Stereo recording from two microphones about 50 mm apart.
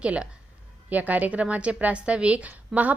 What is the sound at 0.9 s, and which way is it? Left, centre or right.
A woman's voice, right.